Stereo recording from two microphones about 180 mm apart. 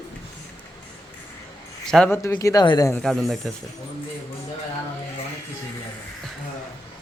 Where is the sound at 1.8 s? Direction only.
5° left (ahead or behind).